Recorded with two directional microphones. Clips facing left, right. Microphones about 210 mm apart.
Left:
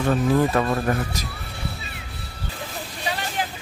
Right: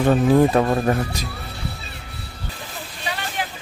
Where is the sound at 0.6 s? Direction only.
20° right (ahead or behind).